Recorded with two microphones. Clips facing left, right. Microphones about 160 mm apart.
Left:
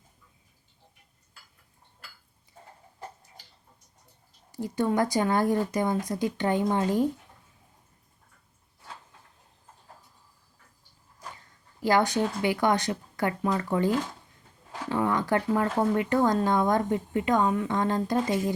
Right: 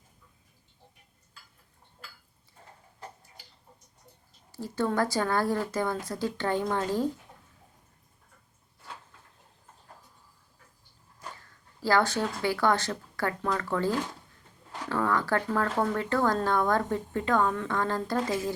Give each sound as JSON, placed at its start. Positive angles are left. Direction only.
{"t": 4.5, "sound": "speech", "side_deg": 15}
{"t": 11.8, "sound": "speech", "side_deg": 15}